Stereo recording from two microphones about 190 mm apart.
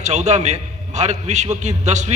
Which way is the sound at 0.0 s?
35° right (ahead or behind).